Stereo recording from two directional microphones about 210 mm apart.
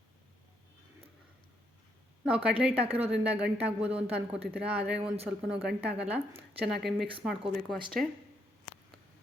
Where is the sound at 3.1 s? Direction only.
5° right (ahead or behind).